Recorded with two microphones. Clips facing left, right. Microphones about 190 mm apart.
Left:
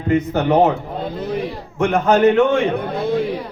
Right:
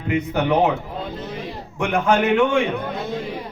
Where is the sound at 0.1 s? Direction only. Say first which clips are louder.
Left 4 dB; 40° left (ahead or behind).